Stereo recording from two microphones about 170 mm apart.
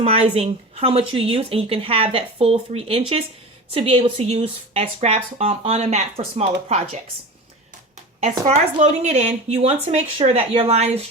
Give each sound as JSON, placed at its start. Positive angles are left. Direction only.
{"t": 0.0, "sound": "speech", "side_deg": -35}
{"t": 8.2, "sound": "speech", "side_deg": -40}